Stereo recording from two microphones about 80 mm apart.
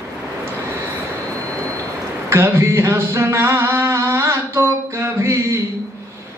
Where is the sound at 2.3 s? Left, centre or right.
Right.